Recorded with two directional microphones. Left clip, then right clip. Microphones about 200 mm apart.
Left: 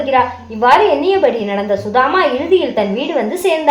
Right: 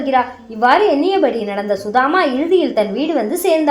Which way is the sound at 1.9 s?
40° right (ahead or behind).